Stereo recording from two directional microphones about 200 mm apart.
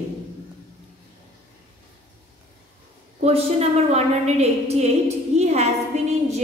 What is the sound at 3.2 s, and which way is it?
A woman's voice, 30° right (ahead or behind).